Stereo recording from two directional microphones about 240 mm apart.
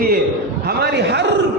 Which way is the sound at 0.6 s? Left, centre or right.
Right.